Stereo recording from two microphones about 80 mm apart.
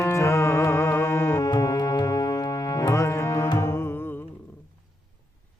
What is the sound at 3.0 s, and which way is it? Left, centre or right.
Music, left.